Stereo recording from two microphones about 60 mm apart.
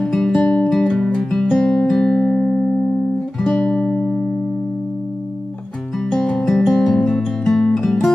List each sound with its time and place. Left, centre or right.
0.0 s music: centre
0.4 s music: left
0.7 s music: centre
5.9 s music: centre